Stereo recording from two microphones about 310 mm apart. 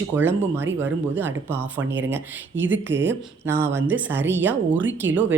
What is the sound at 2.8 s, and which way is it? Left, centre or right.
Speech, centre.